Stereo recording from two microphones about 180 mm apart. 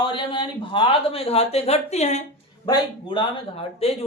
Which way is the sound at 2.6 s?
25° left (ahead or behind).